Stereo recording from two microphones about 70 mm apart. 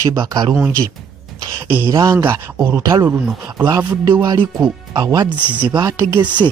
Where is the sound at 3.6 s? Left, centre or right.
Right.